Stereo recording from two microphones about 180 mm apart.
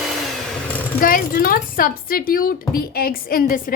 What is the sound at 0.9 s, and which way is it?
A woman's voice, 50° left (ahead or behind).